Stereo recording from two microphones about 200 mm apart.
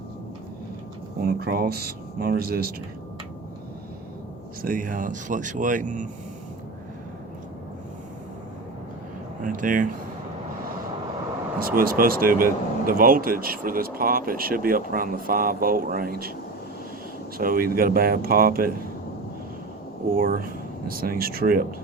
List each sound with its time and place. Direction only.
1.2 s speech: 50° right (ahead or behind)
4.6 s speech: 45° right (ahead or behind)
9.4 s speech: 40° right (ahead or behind)
11.6 s speech: 45° right (ahead or behind)
17.3 s speech: 45° right (ahead or behind)
20.1 s speech: 45° right (ahead or behind)